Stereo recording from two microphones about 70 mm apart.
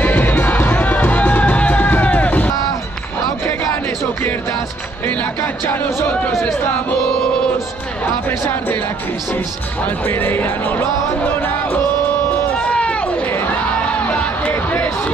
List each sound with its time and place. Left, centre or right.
0.0 s music: left
5.0 s music: left
8.0 s music: left
9.8 s music: left
12.5 s run: centre
14.0 s music: centre